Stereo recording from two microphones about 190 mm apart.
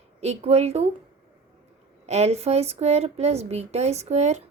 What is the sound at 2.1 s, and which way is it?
Speech, 35° right (ahead or behind).